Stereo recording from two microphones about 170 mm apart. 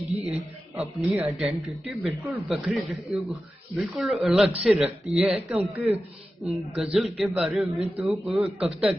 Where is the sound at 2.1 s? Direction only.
20° right (ahead or behind).